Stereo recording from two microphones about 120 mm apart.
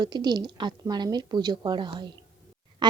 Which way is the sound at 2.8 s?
40° right (ahead or behind).